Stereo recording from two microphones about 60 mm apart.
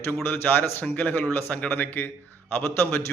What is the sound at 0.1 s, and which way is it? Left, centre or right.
Speech, left.